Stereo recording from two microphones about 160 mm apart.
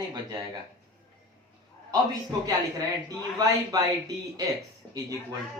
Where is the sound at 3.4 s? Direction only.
20° right (ahead or behind).